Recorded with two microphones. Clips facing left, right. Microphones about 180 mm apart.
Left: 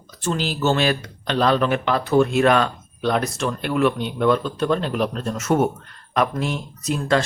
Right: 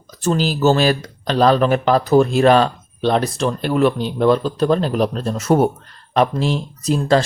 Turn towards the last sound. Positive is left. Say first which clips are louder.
# right 5 dB
turn(degrees=-30)  # may be behind; listen again after turning